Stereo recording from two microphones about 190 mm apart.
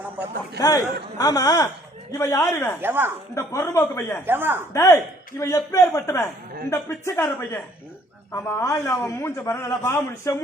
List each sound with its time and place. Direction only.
0.6 s a man's voice: 20° left (ahead or behind)
2.8 s a woman's voice: 10° right (ahead or behind)
3.3 s a man's voice: 15° left (ahead or behind)
4.3 s a woman's voice: 10° right (ahead or behind)
4.7 s a man's voice: 15° left (ahead or behind)